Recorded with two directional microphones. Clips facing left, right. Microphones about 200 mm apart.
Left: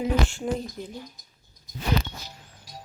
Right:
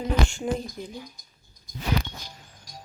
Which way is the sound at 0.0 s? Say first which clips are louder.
Left 1 dB; centre (ahead or behind).